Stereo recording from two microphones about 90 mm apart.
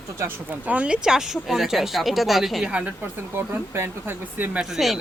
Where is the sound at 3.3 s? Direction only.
25° right (ahead or behind).